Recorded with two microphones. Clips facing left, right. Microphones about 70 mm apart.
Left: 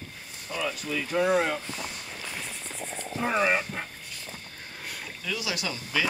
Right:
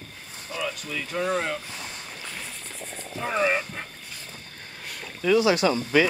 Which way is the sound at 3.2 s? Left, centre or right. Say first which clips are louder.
Right 1 dB; centre.